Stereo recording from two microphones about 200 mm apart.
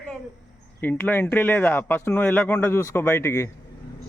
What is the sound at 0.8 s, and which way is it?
Speech, 10° left (ahead or behind).